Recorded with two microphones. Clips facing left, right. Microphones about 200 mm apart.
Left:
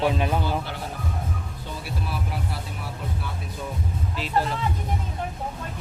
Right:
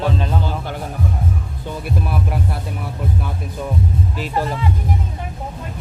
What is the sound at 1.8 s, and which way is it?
Music, 55° right (ahead or behind).